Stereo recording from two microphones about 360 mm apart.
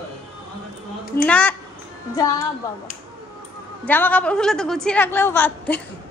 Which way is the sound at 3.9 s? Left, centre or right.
Centre.